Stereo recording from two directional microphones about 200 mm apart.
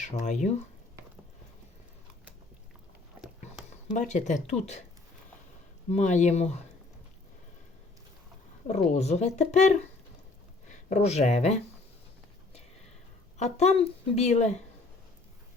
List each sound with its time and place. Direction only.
0.0 s speech: 35° left (ahead or behind)
4.1 s speech: 35° left (ahead or behind)
5.9 s speech: 35° left (ahead or behind)
8.6 s speech: 35° left (ahead or behind)
13.4 s speech: 35° left (ahead or behind)